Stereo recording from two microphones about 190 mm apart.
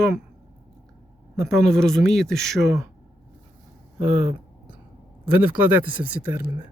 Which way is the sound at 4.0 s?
35° right (ahead or behind).